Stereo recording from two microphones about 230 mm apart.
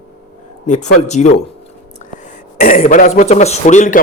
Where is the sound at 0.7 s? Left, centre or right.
Left.